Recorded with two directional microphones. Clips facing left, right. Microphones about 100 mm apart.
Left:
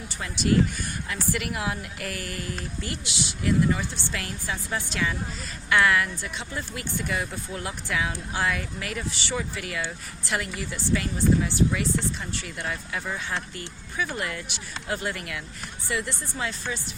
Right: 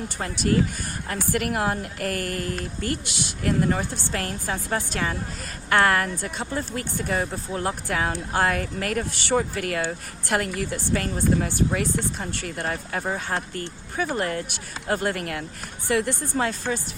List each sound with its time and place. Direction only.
0.2 s speech: 45° right (ahead or behind)